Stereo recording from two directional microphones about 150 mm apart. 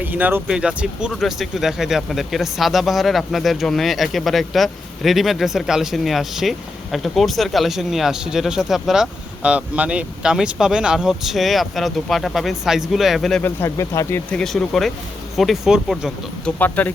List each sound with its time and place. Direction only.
0.0 s speech: 10° right (ahead or behind)
13.4 s speech: 15° left (ahead or behind)
14.3 s speech: 5° left (ahead or behind)
16.6 s speech: 10° left (ahead or behind)